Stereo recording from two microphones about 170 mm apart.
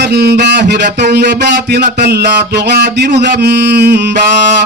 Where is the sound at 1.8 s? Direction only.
65° right (ahead or behind).